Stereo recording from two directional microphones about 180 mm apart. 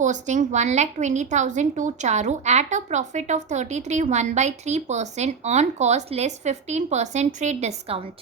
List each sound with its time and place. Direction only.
0.0 s a woman's voice: 45° right (ahead or behind)